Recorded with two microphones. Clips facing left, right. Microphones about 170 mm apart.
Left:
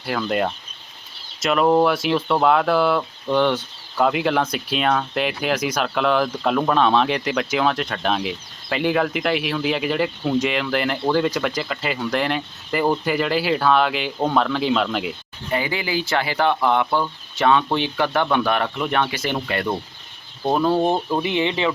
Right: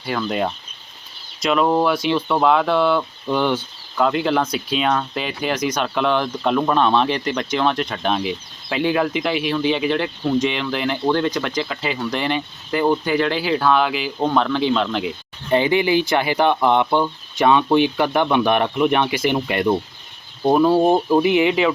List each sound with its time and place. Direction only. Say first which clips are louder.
0.0 s speech: even; centre (ahead or behind)
15.4 s speech: right 7 dB; 25° right (ahead or behind); by 21.7 s 10° right (ahead or behind)